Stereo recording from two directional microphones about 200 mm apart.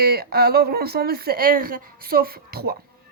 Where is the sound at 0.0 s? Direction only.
50° right (ahead or behind).